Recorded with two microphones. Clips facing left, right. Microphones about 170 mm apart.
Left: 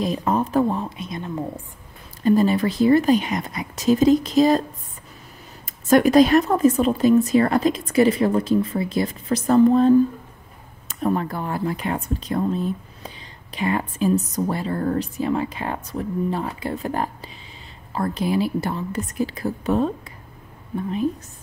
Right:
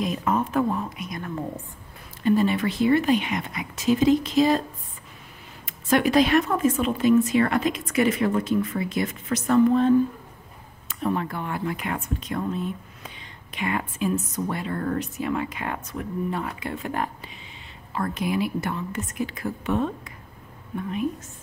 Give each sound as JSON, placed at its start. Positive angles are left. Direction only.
{"t": 0.0, "sound": "speech", "side_deg": 35}
{"t": 2.2, "sound": "speech", "side_deg": 40}
{"t": 5.7, "sound": "speech", "side_deg": 40}